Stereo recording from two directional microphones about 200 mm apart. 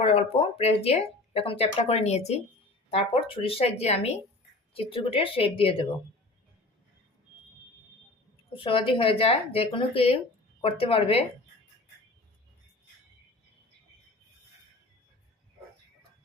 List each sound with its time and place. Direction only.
0.0 s speech: 30° left (ahead or behind)
8.5 s speech: 25° left (ahead or behind)